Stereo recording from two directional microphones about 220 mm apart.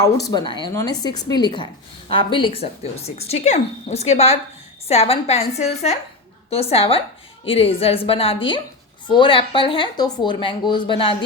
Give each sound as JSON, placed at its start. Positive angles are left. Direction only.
{"t": 0.0, "sound": "a woman's voice", "side_deg": 15}